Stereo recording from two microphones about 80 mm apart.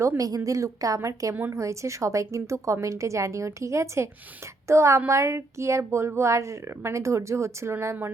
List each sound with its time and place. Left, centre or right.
0.2 s a woman's voice: right